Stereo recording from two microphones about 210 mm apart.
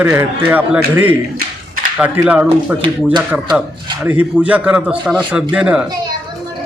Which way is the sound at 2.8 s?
20° right (ahead or behind).